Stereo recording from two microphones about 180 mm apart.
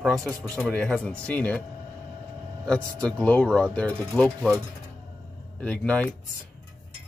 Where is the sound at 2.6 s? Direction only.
5° left (ahead or behind).